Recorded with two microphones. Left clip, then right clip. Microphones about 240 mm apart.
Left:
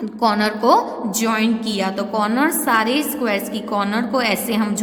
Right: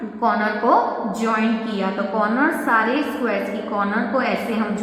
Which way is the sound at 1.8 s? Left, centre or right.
Left.